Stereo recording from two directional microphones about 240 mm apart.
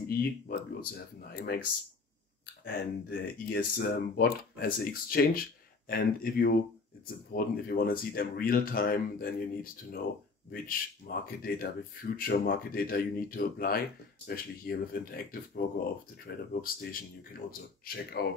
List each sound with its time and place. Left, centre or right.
0.0 s speech: left